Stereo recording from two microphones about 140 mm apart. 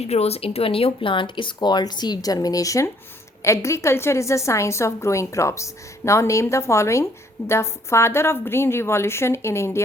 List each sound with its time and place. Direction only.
0.0 s a woman's voice: 50° left (ahead or behind); by 9.8 s 20° left (ahead or behind)